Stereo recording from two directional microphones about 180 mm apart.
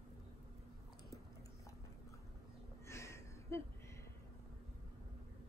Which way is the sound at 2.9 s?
15° left (ahead or behind).